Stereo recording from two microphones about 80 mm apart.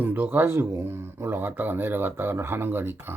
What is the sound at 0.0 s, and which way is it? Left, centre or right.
Speech, right.